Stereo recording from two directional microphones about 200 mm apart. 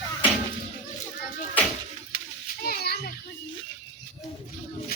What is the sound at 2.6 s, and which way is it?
Children playing, 50° left (ahead or behind).